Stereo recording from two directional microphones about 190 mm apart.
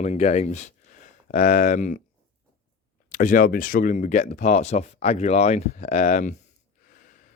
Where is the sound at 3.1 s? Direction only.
45° left (ahead or behind).